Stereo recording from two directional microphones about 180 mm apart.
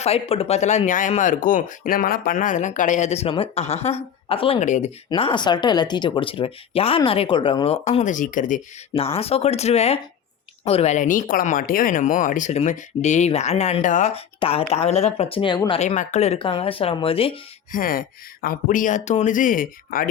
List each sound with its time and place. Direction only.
0.0 s speech: 35° left (ahead or behind)
4.6 s speech: 40° left (ahead or behind)
9.1 s speech: 35° left (ahead or behind)
15.8 s speech: 40° left (ahead or behind)
17.7 s speech: 50° left (ahead or behind)